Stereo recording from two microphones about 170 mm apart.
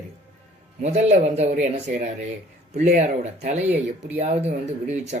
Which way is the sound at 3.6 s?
10° right (ahead or behind).